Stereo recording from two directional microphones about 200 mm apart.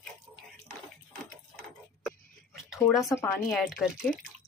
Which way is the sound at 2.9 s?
Centre (ahead or behind).